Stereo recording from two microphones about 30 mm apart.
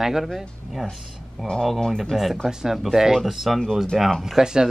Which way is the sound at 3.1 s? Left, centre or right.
Centre.